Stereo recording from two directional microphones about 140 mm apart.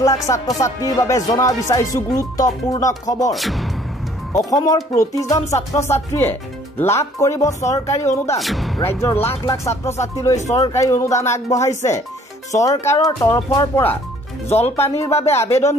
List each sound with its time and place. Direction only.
0.0 s speech: 25° left (ahead or behind)
3.3 s speech: centre (ahead or behind)
4.3 s speech: 25° left (ahead or behind)
8.4 s speech: centre (ahead or behind)
8.8 s speech: 15° left (ahead or behind)
10.3 s speech: 55° left (ahead or behind)
10.7 s speech: 20° left (ahead or behind)